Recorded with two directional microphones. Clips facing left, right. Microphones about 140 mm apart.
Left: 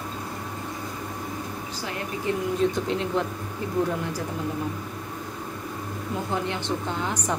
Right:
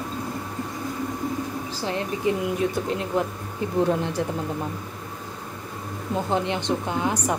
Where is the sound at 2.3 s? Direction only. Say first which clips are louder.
Even; 15° right (ahead or behind).